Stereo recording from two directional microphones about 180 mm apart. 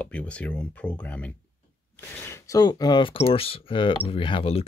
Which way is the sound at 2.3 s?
20° left (ahead or behind).